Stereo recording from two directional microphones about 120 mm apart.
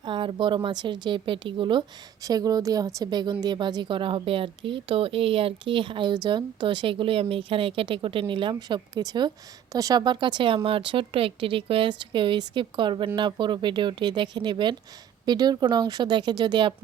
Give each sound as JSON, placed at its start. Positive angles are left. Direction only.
{"t": 0.0, "sound": "speech", "side_deg": -45}
{"t": 2.2, "sound": "speech", "side_deg": -30}